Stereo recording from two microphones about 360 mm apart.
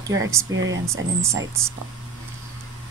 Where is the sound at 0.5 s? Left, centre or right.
Right.